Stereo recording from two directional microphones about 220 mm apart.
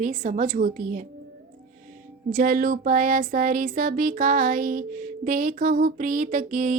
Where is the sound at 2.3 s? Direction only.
40° right (ahead or behind).